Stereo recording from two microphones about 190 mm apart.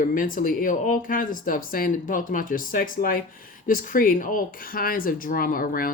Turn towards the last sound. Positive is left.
turn(degrees=50)  # may be behind; listen again after turning